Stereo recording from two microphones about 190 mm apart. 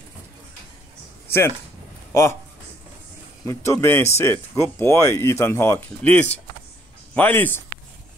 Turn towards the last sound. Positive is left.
turn(degrees=10)  # may be behind; listen again after turning